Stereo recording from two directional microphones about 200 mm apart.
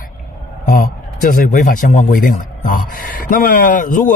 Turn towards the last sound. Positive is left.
turn(degrees=45)  # may be behind; listen again after turning